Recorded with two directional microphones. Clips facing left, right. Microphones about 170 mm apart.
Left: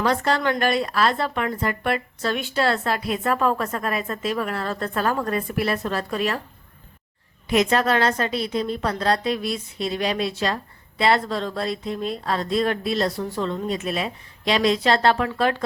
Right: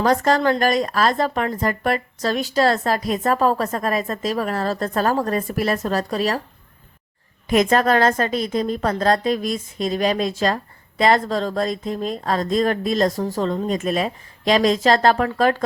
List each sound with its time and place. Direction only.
0.0 s a woman's voice: 40° right (ahead or behind)
7.5 s a woman's voice: 50° right (ahead or behind)